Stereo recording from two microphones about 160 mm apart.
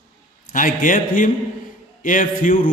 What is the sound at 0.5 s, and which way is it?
A man's voice, 55° left (ahead or behind).